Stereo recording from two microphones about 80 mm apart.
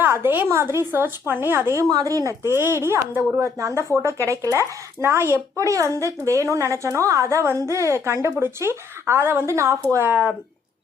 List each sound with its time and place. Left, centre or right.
0.0 s a woman's voice: right
1.9 s speech: right